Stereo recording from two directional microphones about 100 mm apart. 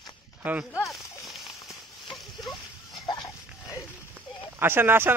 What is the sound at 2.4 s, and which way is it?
Dog, centre (ahead or behind).